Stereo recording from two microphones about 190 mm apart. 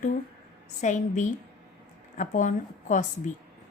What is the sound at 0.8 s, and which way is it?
A woman's voice, 40° left (ahead or behind).